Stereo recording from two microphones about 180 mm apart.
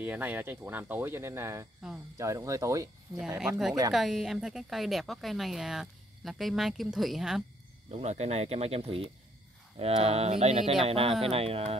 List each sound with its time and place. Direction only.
0.0 s speech: 10° right (ahead or behind)
3.3 s a woman's voice: 5° right (ahead or behind)
7.9 s speech: 40° right (ahead or behind)